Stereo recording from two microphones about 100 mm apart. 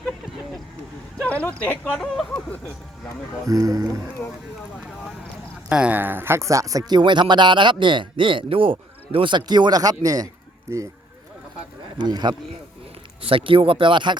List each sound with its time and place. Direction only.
1.2 s speech: 15° left (ahead or behind)
1.8 s speech: 5° left (ahead or behind)
3.4 s speech: 35° right (ahead or behind)
5.6 s speech: 15° right (ahead or behind); by 10.8 s 30° right (ahead or behind)
11.9 s speech: 45° right (ahead or behind)
13.2 s speech: 65° right (ahead or behind)